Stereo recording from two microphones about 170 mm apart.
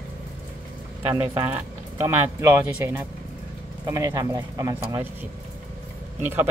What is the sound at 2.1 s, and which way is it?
Speech, 15° right (ahead or behind).